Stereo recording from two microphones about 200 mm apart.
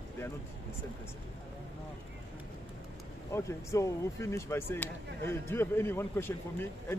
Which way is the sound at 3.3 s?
15° left (ahead or behind).